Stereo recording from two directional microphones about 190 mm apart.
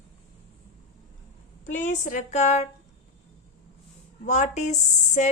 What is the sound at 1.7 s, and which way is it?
Speech, 40° left (ahead or behind).